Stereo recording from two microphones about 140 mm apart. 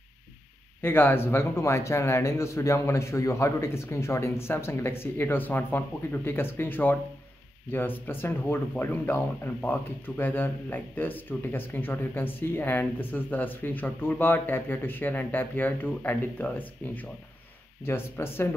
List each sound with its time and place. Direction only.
0.8 s speech: 15° left (ahead or behind)